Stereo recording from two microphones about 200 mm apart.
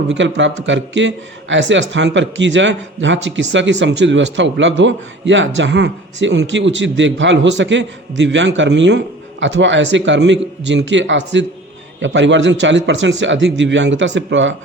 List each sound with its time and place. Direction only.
0.1 s a man's voice: 65° right (ahead or behind)